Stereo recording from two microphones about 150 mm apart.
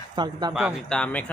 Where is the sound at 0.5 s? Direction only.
5° left (ahead or behind).